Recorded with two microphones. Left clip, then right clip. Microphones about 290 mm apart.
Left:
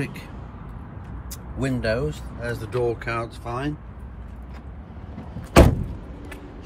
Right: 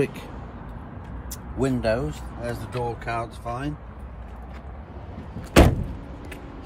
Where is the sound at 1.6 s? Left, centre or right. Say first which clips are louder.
Even; centre.